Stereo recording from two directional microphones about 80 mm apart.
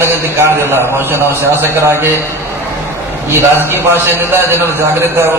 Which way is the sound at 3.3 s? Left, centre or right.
Right.